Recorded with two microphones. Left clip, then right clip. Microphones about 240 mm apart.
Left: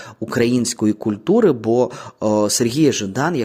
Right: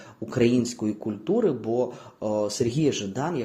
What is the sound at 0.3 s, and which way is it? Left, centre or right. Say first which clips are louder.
Speech: left 5 dB; left.